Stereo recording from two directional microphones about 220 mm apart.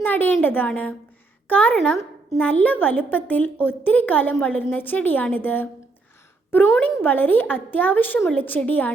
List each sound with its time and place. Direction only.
0.0 s a woman's voice: 5° left (ahead or behind)